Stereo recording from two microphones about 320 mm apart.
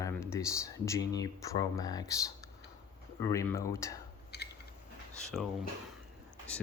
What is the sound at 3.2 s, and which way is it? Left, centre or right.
Speech, centre.